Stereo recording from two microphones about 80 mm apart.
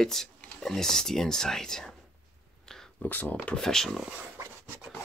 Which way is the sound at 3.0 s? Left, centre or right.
Left.